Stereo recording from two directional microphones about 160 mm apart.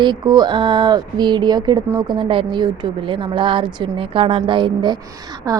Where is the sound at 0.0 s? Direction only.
25° right (ahead or behind).